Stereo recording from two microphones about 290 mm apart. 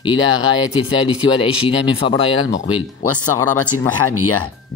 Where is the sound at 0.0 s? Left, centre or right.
Centre.